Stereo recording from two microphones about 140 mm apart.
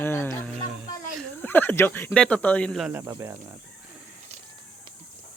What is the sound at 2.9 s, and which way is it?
Speech, 20° right (ahead or behind).